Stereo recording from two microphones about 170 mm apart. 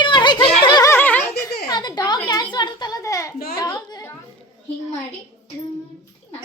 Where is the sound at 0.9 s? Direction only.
10° left (ahead or behind).